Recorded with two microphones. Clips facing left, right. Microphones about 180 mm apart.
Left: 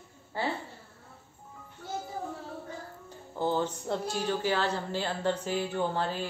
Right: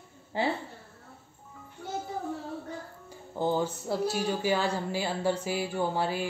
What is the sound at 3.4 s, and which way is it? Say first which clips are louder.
Speech: right 1 dB; 15° right (ahead or behind).